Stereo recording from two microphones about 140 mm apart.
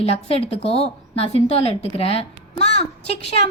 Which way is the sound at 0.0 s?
45° left (ahead or behind).